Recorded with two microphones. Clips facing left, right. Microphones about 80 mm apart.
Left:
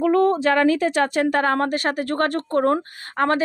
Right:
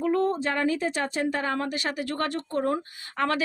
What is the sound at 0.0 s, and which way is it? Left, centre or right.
A woman's voice, left.